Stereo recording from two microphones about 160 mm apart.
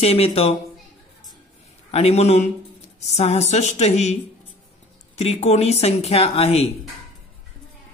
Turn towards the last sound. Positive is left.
turn(degrees=40)  # may be behind; listen again after turning